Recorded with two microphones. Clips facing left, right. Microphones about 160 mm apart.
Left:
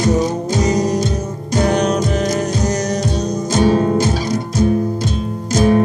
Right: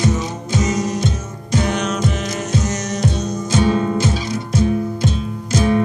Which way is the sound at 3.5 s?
40° left (ahead or behind).